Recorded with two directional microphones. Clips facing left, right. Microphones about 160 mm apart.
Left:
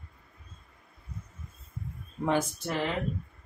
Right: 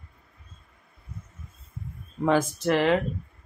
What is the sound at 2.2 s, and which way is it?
Speech, 90° right.